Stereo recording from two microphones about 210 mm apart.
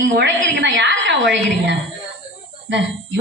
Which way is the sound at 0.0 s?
60° right (ahead or behind).